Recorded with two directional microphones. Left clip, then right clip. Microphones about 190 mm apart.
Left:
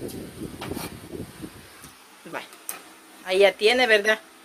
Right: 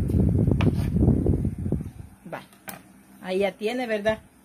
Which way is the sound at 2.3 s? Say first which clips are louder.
Left 2 dB; 10° left (ahead or behind).